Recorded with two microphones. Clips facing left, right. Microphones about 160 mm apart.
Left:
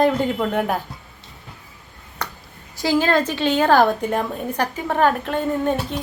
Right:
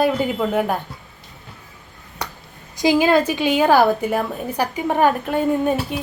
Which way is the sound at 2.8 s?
15° right (ahead or behind).